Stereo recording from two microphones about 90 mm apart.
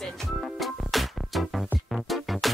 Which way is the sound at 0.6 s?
Centre (ahead or behind).